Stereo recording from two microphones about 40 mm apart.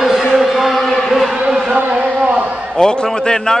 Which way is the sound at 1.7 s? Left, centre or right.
Right.